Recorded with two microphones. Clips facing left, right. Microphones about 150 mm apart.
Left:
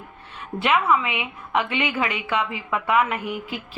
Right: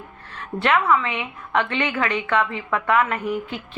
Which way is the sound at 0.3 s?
5° left (ahead or behind).